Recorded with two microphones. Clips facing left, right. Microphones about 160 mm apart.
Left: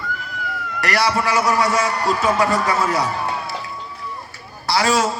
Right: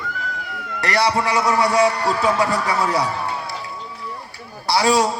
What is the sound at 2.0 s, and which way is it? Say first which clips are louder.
A man's voice: left 1 dB; 20° left (ahead or behind).